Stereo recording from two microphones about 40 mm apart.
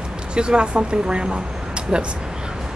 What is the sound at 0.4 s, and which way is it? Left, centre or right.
Speech, right.